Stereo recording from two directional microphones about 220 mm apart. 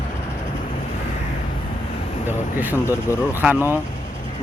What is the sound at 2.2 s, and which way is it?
Vehicle, 10° right (ahead or behind).